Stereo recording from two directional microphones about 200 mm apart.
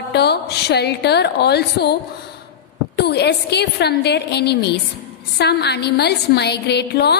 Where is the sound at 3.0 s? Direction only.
55° left (ahead or behind).